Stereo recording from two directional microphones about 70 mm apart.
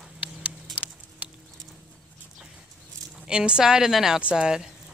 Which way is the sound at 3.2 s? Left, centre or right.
Centre.